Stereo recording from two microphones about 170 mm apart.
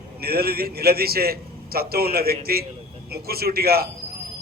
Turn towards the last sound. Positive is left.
turn(degrees=-65)  # may be behind; listen again after turning